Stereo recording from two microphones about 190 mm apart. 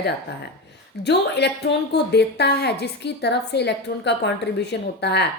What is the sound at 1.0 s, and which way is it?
A woman's voice, 60° left (ahead or behind).